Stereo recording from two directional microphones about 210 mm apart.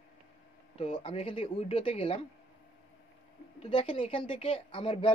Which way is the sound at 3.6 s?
25° left (ahead or behind).